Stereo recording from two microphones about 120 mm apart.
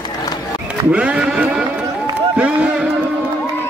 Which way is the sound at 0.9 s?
10° right (ahead or behind).